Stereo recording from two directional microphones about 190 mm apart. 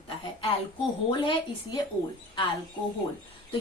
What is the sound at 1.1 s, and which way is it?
Speech, 25° left (ahead or behind).